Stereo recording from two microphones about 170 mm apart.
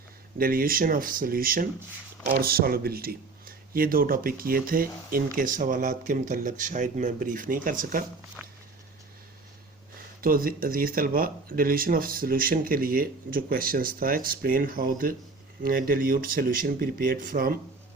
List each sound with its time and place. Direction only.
0.3 s speech: 60° right (ahead or behind)
8.4 s a sound: 10° right (ahead or behind)
10.2 s speech: 60° right (ahead or behind)